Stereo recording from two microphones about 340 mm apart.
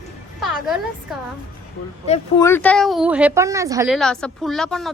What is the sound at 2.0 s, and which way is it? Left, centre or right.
Speech, centre.